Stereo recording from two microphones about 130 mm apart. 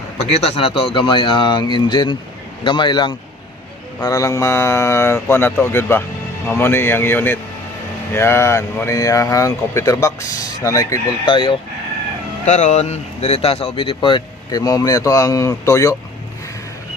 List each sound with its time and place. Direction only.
0.2 s speech: 60° left (ahead or behind); by 3.2 s 35° left (ahead or behind)
4.0 s a man's voice: 25° left (ahead or behind)
11.3 s speech: 35° left (ahead or behind)
12.5 s speech: 65° left (ahead or behind); by 14.2 s 45° left (ahead or behind)
14.5 s speech: 30° left (ahead or behind)